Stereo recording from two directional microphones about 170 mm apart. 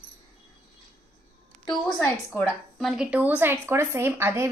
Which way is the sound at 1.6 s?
5° left (ahead or behind).